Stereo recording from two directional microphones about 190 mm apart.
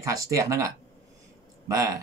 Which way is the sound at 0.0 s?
15° right (ahead or behind).